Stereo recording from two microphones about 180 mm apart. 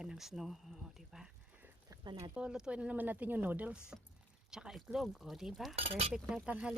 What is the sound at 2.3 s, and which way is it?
Speech, 5° right (ahead or behind).